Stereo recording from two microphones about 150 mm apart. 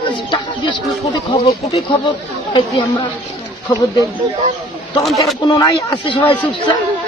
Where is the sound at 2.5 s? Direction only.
30° left (ahead or behind).